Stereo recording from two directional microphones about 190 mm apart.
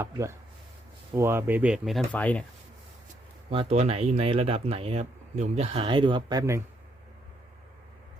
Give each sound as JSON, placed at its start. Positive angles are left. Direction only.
{"t": 0.0, "sound": "speech", "side_deg": -15}
{"t": 3.5, "sound": "speech", "side_deg": -30}